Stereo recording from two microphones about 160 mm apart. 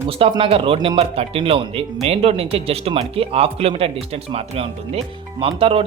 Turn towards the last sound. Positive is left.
turn(degrees=-35)  # may be behind; listen again after turning